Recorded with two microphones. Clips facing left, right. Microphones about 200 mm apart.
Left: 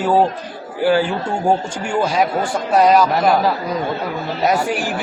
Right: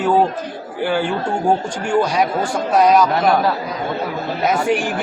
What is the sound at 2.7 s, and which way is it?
Speech, centre (ahead or behind).